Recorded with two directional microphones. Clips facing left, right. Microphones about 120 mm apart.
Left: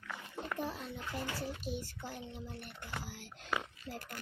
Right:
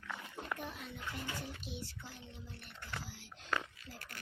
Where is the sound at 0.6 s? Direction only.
35° left (ahead or behind).